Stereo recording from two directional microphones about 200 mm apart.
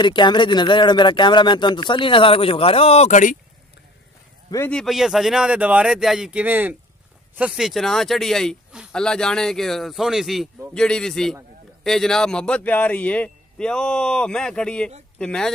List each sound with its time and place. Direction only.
0.0 s speech: 25° left (ahead or behind)
4.5 s speech: 10° left (ahead or behind)